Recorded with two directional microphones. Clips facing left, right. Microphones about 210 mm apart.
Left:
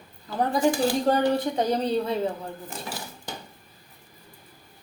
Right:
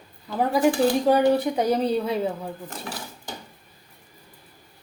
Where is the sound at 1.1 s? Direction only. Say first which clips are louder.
Right 3 dB; 5° right (ahead or behind).